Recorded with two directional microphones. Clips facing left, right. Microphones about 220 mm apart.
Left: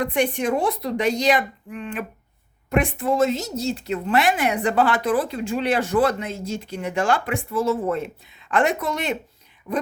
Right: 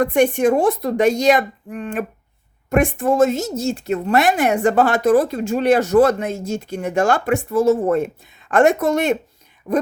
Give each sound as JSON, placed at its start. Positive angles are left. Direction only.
{"t": 0.0, "sound": "a woman's voice", "side_deg": -45}